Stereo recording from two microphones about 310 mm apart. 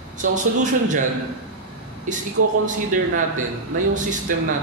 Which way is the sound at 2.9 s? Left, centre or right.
Right.